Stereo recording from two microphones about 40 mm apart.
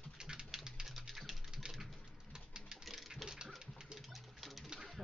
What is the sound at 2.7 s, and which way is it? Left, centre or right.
Sewing machine, centre.